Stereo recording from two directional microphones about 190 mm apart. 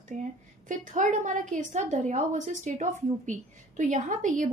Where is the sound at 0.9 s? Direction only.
40° right (ahead or behind).